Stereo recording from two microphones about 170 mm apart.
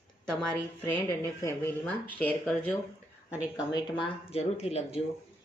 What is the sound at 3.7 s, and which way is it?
Speech, 30° left (ahead or behind).